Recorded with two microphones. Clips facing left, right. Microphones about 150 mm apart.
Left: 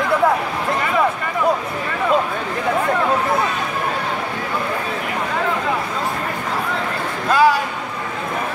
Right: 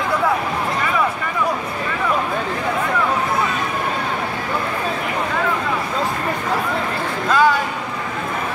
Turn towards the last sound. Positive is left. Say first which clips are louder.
# left 1 dB
turn(degrees=10)  # may be behind; listen again after turning